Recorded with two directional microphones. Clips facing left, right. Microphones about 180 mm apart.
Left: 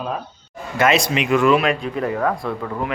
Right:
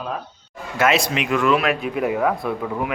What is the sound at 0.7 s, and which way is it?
A man's voice, 5° right (ahead or behind).